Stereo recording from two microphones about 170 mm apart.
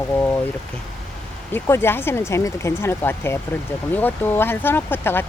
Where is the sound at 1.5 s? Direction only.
15° left (ahead or behind).